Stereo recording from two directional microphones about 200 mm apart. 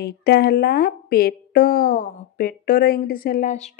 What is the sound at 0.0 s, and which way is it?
A woman's voice, 50° left (ahead or behind).